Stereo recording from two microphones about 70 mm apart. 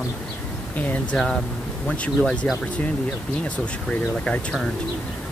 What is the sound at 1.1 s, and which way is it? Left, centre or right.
Speech, centre.